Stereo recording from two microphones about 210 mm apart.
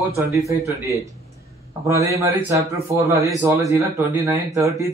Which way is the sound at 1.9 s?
15° right (ahead or behind).